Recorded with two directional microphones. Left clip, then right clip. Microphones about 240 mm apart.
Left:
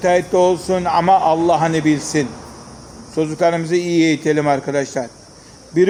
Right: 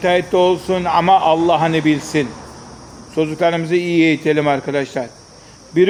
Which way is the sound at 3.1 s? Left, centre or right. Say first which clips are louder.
Even; centre.